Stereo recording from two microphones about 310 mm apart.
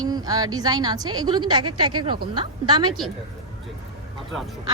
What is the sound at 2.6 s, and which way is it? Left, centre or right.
Speech, centre.